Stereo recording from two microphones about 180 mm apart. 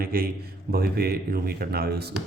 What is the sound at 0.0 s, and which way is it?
Speech, 55° right (ahead or behind).